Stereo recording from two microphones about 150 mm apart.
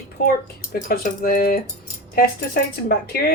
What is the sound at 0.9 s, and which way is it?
Speech, 75° left (ahead or behind).